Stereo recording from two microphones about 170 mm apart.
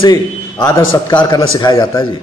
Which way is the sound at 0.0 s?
20° left (ahead or behind).